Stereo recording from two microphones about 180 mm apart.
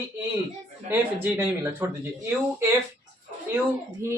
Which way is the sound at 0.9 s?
10° right (ahead or behind).